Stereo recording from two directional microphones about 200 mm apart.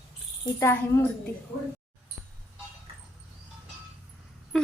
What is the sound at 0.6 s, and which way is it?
Speech, 15° left (ahead or behind).